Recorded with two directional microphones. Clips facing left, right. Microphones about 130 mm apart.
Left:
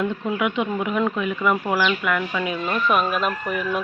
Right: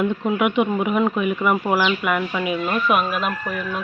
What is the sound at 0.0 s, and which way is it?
Speech, 15° right (ahead or behind).